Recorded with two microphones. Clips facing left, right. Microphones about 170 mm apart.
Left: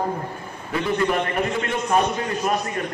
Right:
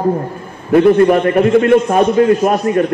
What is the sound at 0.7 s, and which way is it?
A man's voice, 55° right (ahead or behind).